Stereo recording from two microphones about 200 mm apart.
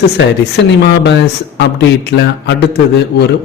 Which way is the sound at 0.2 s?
60° left (ahead or behind).